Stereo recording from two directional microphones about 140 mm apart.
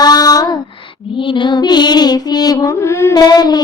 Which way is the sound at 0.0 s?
30° left (ahead or behind).